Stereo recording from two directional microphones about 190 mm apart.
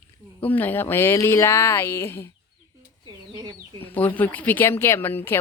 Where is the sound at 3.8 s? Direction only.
10° left (ahead or behind).